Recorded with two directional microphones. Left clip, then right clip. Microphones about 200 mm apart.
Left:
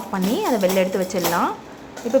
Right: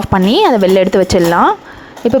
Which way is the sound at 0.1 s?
45° right (ahead or behind).